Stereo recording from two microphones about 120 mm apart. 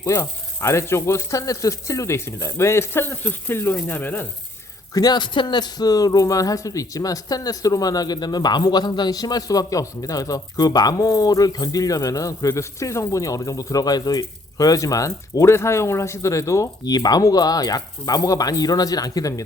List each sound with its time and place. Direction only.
0.0 s speech: 25° left (ahead or behind)
4.9 s speech: 35° left (ahead or behind)